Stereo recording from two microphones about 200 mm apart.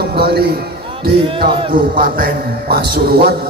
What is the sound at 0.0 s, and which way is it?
Music, 50° right (ahead or behind).